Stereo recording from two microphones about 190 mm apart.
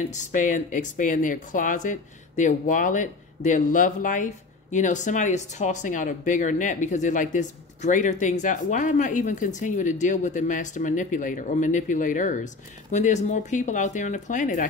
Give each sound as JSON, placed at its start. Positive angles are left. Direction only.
{"t": 0.1, "sound": "speech", "side_deg": 40}